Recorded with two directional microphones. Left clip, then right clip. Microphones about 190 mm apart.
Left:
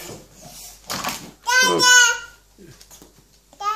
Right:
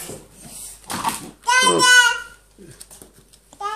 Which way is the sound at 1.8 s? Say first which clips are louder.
Even; 10° left (ahead or behind).